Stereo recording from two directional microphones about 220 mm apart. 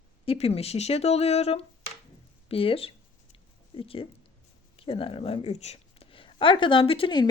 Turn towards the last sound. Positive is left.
turn(degrees=20)  # may be behind; listen again after turning